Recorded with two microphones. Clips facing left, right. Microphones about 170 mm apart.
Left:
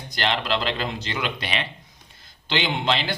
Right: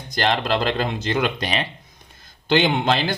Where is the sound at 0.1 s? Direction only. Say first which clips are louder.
Right 4 dB; 45° right (ahead or behind).